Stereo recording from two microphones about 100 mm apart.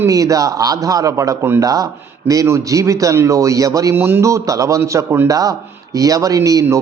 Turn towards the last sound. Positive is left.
turn(degrees=-35)  # may be behind; listen again after turning